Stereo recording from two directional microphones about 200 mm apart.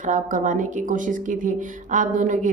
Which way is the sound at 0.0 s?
40° right (ahead or behind).